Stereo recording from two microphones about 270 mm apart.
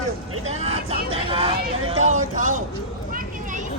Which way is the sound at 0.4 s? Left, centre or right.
Right.